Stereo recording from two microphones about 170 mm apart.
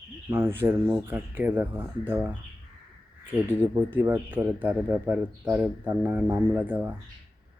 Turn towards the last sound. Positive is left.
turn(degrees=-10)  # may be behind; listen again after turning